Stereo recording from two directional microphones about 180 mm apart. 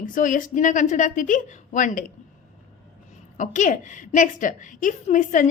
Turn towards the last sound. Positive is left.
turn(degrees=45)  # may be behind; listen again after turning